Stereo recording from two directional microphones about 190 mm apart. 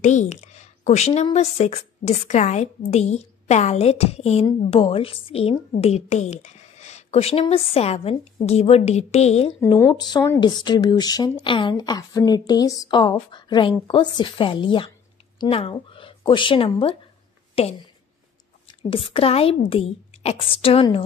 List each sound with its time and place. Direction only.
0.0 s a woman's voice: 40° left (ahead or behind)
9.8 s a woman's voice: 20° left (ahead or behind)
18.8 s speech: 30° left (ahead or behind)